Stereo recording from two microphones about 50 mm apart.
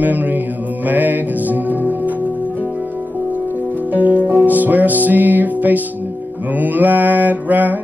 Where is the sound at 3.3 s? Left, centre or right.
Right.